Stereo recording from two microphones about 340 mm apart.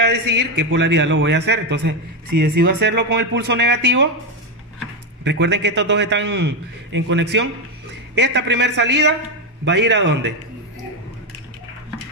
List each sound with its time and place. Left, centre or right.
0.0 s a man's voice: right
5.2 s a man's voice: right